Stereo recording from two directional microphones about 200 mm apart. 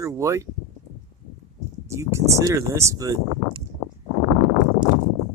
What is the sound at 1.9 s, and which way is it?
Speech, 15° right (ahead or behind).